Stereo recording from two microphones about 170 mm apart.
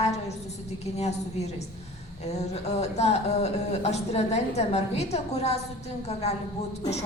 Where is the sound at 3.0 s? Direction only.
40° left (ahead or behind).